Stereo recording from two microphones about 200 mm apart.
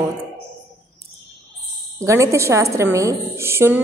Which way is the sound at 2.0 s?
15° right (ahead or behind).